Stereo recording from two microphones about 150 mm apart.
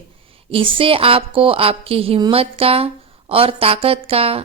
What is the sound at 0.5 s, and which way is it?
A woman's voice, 35° right (ahead or behind).